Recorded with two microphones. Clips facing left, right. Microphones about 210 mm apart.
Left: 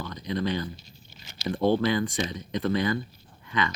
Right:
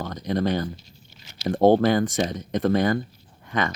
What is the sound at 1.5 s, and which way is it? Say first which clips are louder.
Speech: right 6 dB; 45° right (ahead or behind).